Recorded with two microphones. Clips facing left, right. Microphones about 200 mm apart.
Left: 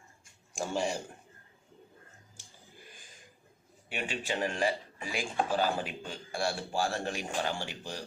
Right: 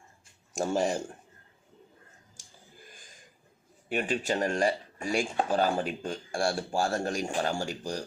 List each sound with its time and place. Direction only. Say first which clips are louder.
0.5 s speech: right 5 dB; 45° right (ahead or behind)
3.8 s speech: right 6 dB; 45° right (ahead or behind)